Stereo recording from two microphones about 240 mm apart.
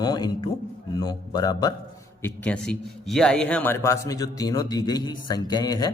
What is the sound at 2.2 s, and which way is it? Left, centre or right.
A man's voice, centre.